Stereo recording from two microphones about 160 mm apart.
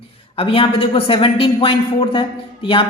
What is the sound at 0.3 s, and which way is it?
A man's voice, 35° left (ahead or behind).